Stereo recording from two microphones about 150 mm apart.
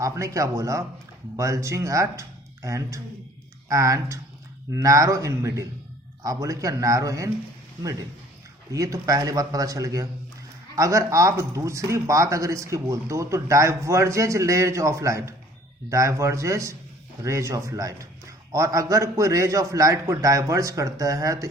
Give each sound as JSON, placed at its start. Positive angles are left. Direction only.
{"t": 0.0, "sound": "speech", "side_deg": -20}
{"t": 8.7, "sound": "speech", "side_deg": -20}